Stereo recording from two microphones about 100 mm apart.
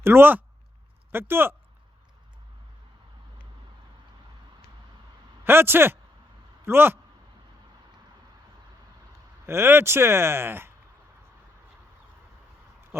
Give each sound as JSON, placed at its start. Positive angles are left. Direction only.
{"t": 0.0, "sound": "speech", "side_deg": -20}
{"t": 5.5, "sound": "speech", "side_deg": -20}
{"t": 9.5, "sound": "speech", "side_deg": -25}
{"t": 12.9, "sound": "a sound", "side_deg": -25}